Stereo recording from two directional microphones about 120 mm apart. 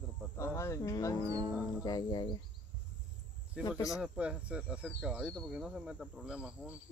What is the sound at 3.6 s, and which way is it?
Speech, 10° right (ahead or behind).